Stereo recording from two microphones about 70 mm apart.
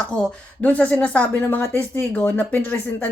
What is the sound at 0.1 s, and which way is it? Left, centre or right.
Speech, left.